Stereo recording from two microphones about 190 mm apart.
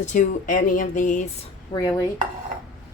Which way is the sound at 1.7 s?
20° left (ahead or behind).